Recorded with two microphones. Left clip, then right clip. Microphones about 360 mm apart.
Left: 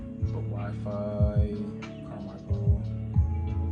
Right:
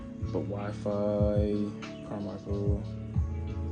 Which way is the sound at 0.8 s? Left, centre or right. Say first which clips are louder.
Right 4 dB; right.